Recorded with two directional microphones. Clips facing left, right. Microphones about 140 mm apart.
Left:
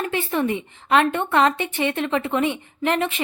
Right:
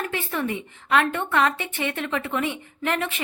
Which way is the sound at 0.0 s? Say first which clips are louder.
Left 5 dB; 25° left (ahead or behind).